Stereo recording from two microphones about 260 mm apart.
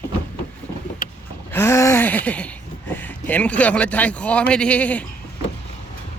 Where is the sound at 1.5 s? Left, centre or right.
Centre.